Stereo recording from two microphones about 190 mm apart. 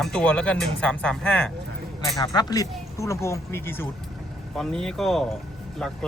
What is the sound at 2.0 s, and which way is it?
Speech, 20° left (ahead or behind).